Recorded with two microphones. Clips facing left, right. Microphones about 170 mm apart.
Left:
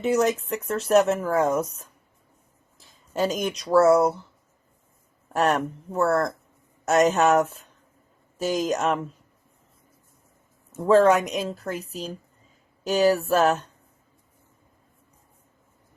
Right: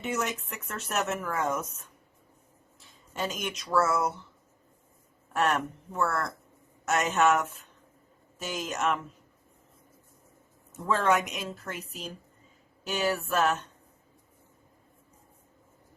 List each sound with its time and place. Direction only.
0.0 s speech: 35° left (ahead or behind)
5.3 s speech: 35° left (ahead or behind)
10.8 s speech: 35° left (ahead or behind)